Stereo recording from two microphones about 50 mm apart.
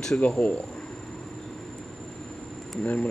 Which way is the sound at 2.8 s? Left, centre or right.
Left.